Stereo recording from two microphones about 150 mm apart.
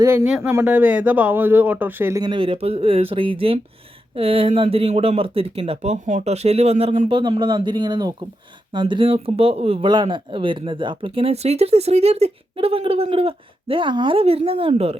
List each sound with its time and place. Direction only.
0.0 s speech: 20° right (ahead or behind)
0.3 s speech: 5° right (ahead or behind)
2.2 s speech: 35° right (ahead or behind)
7.1 s speech: 35° right (ahead or behind)